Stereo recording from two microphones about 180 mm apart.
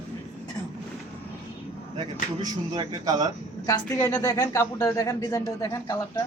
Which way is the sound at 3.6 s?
20° left (ahead or behind).